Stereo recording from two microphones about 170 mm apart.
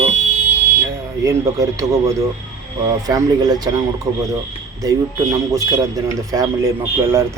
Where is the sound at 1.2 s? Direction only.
20° right (ahead or behind).